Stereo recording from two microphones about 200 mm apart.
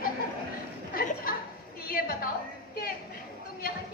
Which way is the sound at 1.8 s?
50° left (ahead or behind).